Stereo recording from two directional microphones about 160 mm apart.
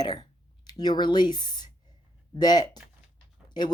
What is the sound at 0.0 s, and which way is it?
Speech, 25° left (ahead or behind).